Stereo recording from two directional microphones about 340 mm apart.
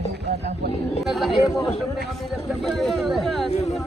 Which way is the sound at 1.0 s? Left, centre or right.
Centre.